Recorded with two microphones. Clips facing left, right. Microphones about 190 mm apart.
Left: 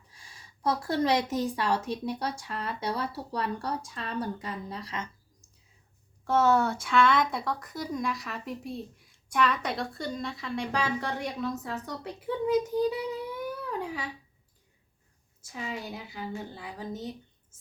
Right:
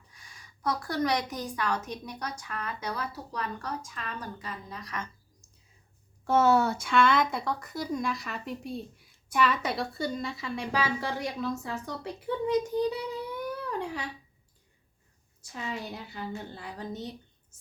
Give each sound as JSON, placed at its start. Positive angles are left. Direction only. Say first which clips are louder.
{"t": 0.1, "sound": "a woman's voice", "louder": "left 2 dB", "side_deg": 30}
{"t": 6.2, "sound": "a child's voice", "louder": "right 1 dB", "side_deg": -5}
{"t": 15.4, "sound": "speech", "louder": "even", "side_deg": 5}